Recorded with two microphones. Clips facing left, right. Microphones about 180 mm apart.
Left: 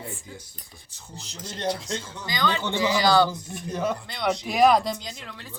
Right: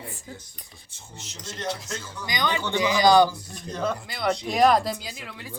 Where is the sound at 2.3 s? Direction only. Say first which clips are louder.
Left 1 dB; 15° right (ahead or behind).